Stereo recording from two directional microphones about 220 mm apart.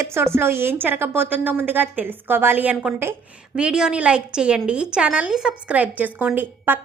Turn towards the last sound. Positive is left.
turn(degrees=-10)  # may be behind; listen again after turning